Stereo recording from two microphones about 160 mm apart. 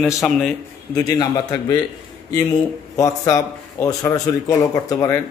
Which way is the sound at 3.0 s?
20° left (ahead or behind).